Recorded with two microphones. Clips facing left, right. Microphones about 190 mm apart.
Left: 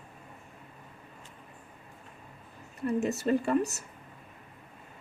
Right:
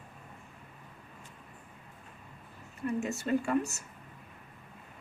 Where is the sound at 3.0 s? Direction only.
35° left (ahead or behind).